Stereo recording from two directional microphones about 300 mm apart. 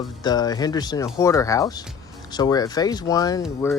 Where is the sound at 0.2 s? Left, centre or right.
Centre.